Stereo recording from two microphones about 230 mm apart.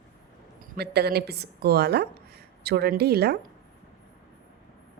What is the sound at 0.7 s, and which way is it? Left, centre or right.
Speech, right.